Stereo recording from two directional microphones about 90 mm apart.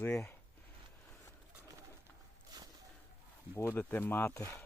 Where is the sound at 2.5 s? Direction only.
50° right (ahead or behind).